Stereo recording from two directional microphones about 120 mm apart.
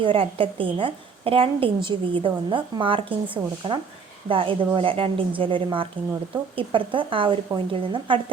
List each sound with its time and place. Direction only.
0.0 s a woman's voice: 50° right (ahead or behind)